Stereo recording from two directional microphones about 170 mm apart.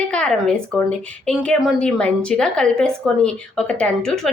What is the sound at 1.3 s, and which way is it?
A woman's voice, 5° left (ahead or behind).